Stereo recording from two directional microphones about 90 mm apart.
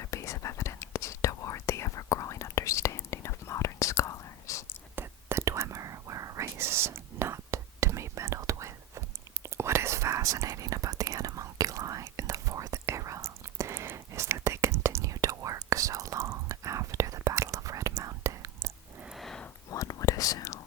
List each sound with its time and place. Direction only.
0.0 s whispering: 35° left (ahead or behind)
4.9 s whispering: 30° right (ahead or behind)
19.1 s a sound: 5° left (ahead or behind)
19.7 s whispering: 40° left (ahead or behind)